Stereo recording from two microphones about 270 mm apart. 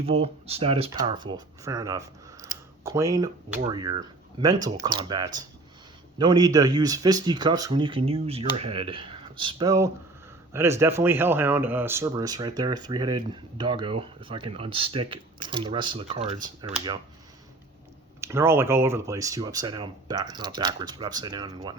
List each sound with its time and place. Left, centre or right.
0.0 s speech: right
18.2 s speech: centre